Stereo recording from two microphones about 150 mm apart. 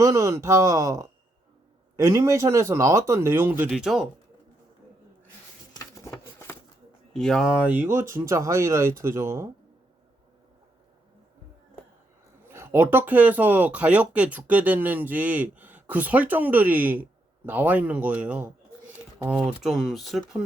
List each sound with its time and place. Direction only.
0.0 s speech: 20° right (ahead or behind)
3.7 s speech: centre (ahead or behind)
5.7 s a sound: 20° left (ahead or behind)
7.1 s speech: 5° left (ahead or behind); by 9.5 s 20° right (ahead or behind)
12.5 s speech: 15° right (ahead or behind)
19.6 s speech: centre (ahead or behind)